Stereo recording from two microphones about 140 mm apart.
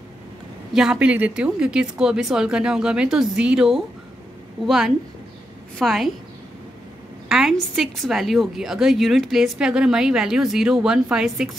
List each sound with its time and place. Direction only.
0.7 s a woman's voice: 5° right (ahead or behind)
7.2 s a woman's voice: 5° right (ahead or behind)